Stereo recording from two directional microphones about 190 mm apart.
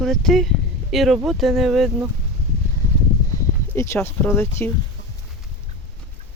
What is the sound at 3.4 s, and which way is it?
Speech, 15° left (ahead or behind).